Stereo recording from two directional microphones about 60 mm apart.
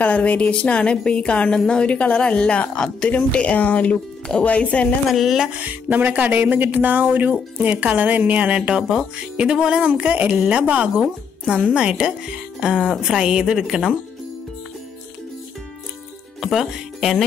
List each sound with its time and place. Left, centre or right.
0.0 s a woman's voice: left
5.1 s speech: centre
5.5 s music: right
10.5 s speech: right
16.3 s speech: centre